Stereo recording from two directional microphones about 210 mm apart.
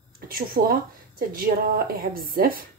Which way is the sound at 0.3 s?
45° right (ahead or behind).